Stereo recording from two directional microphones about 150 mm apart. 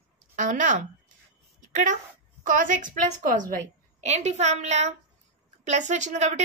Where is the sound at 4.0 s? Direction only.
50° right (ahead or behind).